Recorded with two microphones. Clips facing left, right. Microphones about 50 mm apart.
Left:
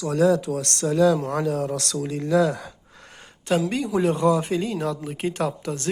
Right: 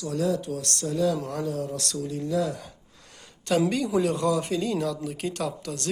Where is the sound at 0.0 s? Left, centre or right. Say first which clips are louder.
Left 7 dB; left.